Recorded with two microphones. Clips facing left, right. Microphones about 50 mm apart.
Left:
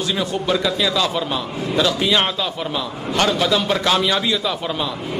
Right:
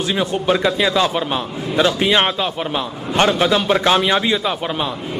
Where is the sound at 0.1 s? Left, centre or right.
Right.